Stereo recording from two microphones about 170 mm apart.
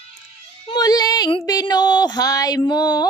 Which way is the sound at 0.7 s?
25° left (ahead or behind).